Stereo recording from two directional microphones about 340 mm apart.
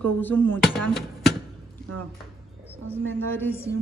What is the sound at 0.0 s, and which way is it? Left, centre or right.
Speech, centre.